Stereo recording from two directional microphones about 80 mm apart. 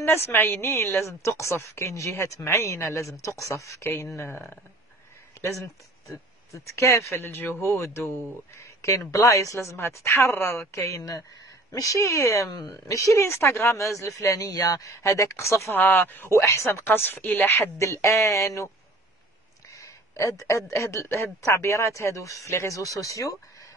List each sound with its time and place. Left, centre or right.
0.0 s speech: left
6.5 s speech: left
15.7 s speech: left
19.7 s a sound: left
20.7 s speech: left